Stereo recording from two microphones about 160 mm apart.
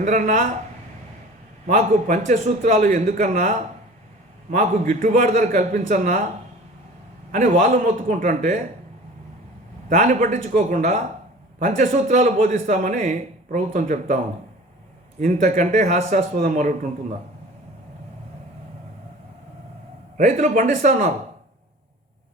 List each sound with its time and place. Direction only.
0.0 s a man's voice: 50° right (ahead or behind)
1.6 s a man's voice: 55° right (ahead or behind)
7.3 s a man's voice: 55° right (ahead or behind)
9.9 s a man's voice: 55° right (ahead or behind)
20.1 s a man's voice: 50° right (ahead or behind)